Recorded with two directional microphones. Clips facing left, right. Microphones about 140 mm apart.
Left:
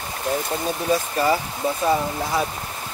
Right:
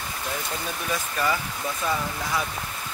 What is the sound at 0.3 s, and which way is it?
Speech, 35° left (ahead or behind).